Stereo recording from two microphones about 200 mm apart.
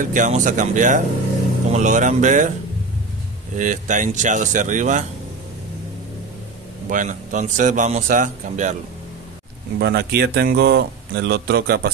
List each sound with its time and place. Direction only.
0.0 s a man's voice: 40° right (ahead or behind)
3.5 s a man's voice: 40° right (ahead or behind)
6.9 s a man's voice: 40° right (ahead or behind)
9.8 s speech: 55° right (ahead or behind)